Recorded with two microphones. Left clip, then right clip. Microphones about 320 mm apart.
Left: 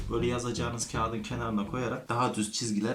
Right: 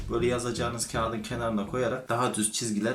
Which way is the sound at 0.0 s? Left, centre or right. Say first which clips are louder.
Right 3 dB; centre.